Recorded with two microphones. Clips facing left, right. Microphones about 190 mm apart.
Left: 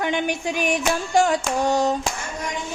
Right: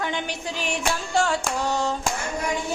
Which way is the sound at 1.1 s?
15° left (ahead or behind).